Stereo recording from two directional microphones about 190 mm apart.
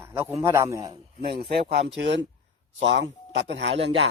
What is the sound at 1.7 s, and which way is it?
Speech, 60° right (ahead or behind).